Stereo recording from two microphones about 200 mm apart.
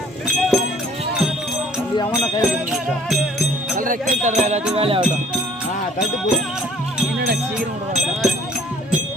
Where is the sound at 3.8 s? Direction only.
40° right (ahead or behind).